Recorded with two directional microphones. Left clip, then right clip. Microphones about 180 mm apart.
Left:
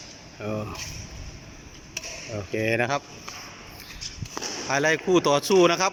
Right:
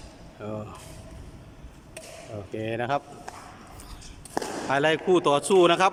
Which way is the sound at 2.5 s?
5° right (ahead or behind).